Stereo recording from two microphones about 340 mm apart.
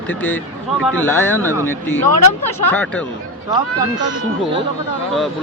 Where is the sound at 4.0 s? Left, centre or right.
Right.